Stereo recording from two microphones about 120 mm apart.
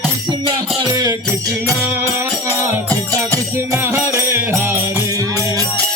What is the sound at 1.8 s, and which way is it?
Music, 20° right (ahead or behind).